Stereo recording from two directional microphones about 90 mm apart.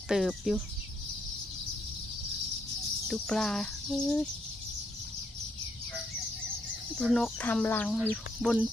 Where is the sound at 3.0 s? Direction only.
5° left (ahead or behind).